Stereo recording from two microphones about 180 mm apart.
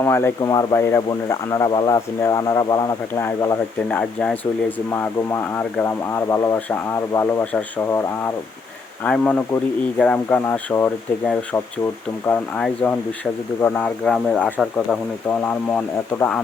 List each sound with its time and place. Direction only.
0.0 s speech: 15° left (ahead or behind)